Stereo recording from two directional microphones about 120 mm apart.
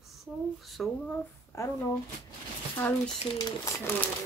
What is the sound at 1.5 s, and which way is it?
Speech, 25° left (ahead or behind).